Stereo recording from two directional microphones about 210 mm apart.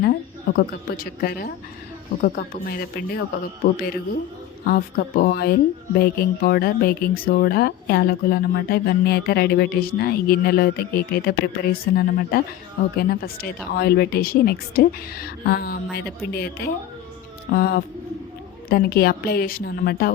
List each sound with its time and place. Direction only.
0.0 s a woman's voice: 45° left (ahead or behind)